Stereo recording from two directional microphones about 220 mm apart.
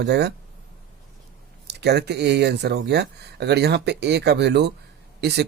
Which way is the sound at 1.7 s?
50° right (ahead or behind).